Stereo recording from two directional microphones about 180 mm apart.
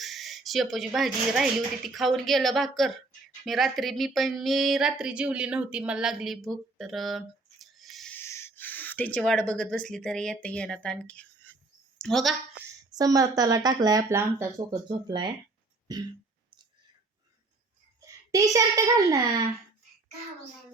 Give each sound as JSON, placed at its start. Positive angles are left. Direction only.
{"t": 0.0, "sound": "speech", "side_deg": 0}
{"t": 8.2, "sound": "gasp", "side_deg": 15}
{"t": 9.5, "sound": "speech", "side_deg": 5}
{"t": 13.0, "sound": "speech", "side_deg": -20}
{"t": 18.0, "sound": "a child's voice", "side_deg": -20}